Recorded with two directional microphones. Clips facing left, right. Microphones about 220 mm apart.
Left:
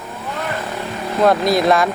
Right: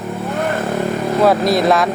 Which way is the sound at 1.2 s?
Centre (ahead or behind).